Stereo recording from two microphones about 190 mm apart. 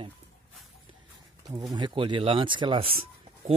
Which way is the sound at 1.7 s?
25° right (ahead or behind).